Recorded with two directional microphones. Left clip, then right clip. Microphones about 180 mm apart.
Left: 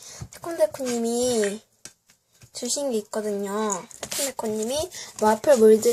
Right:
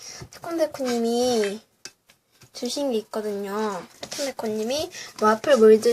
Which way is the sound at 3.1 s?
20° left (ahead or behind).